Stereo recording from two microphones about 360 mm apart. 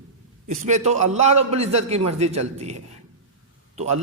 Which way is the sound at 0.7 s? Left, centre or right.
Centre.